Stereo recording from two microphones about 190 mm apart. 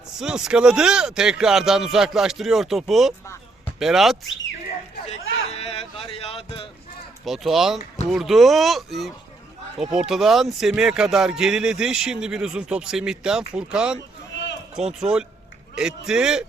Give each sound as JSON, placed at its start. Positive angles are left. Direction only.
{"t": 0.2, "sound": "speech", "side_deg": -5}
{"t": 5.5, "sound": "a sound", "side_deg": 35}
{"t": 7.3, "sound": "speech", "side_deg": 0}